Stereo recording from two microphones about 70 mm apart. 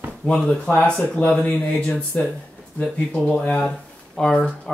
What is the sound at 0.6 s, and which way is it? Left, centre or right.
Speech, left.